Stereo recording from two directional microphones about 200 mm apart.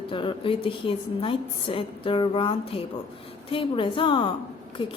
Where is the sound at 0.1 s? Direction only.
25° left (ahead or behind).